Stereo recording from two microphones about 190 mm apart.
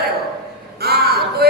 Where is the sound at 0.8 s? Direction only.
55° right (ahead or behind).